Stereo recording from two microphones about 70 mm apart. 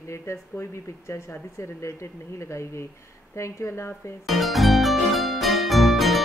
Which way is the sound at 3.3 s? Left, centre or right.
Left.